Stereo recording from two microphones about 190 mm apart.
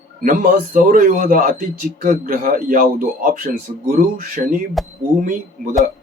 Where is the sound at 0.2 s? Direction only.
45° right (ahead or behind).